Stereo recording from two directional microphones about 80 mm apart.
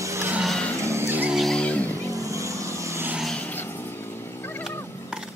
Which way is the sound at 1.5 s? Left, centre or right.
Centre.